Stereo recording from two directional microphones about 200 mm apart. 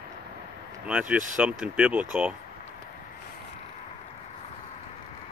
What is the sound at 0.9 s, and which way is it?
Speech, 5° right (ahead or behind).